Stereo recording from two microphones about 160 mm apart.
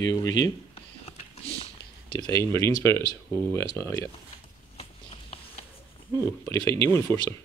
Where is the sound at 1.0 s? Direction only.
40° left (ahead or behind).